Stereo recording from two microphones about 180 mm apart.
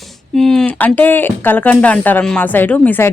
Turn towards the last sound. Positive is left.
turn(degrees=10)  # may be behind; listen again after turning